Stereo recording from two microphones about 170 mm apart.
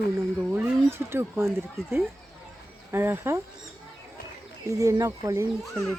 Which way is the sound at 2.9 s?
15° right (ahead or behind).